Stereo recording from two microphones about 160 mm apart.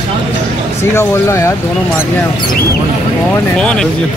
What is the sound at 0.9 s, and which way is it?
Speech, 15° left (ahead or behind).